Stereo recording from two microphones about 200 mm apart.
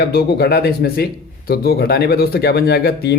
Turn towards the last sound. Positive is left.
turn(degrees=50)  # may be behind; listen again after turning